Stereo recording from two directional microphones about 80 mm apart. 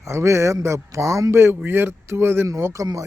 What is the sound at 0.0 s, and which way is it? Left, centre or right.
A man's voice, right.